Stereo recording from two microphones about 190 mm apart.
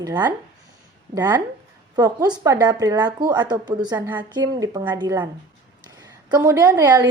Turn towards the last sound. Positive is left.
turn(degrees=-20)  # may be behind; listen again after turning